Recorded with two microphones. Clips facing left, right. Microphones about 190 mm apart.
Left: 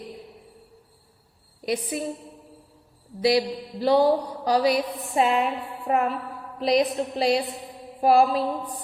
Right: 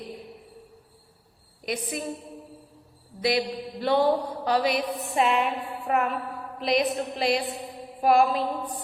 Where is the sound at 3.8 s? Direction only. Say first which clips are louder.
Left 3 dB; 35° left (ahead or behind).